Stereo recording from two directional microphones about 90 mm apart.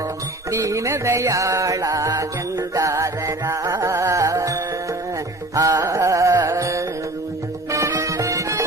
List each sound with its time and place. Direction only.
0.5 s music: 35° right (ahead or behind)
5.5 s carnatic music: 35° right (ahead or behind)
6.5 s music: 35° right (ahead or behind)